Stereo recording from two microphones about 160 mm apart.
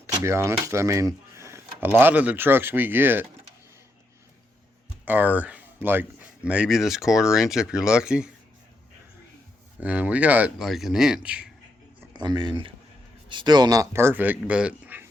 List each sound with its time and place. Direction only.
0.1 s speech: 15° right (ahead or behind)
5.0 s speech: 10° right (ahead or behind)
9.8 s speech: 10° right (ahead or behind)
12.1 s speech: 25° right (ahead or behind); by 15.0 s 10° right (ahead or behind)